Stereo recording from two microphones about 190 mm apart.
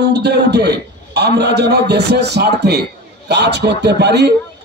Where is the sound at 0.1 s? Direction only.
60° right (ahead or behind).